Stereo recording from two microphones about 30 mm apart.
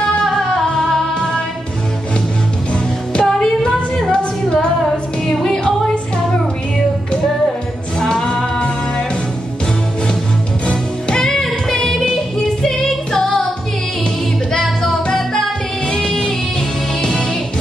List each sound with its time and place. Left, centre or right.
0.6 s music: centre
1.1 s music: left
3.2 s a sound: left
4.0 s female singing: left
5.2 s music: centre
8.0 s music: left
8.5 s music: left
10.7 s music: left
12.0 s music: left
14.6 s music: centre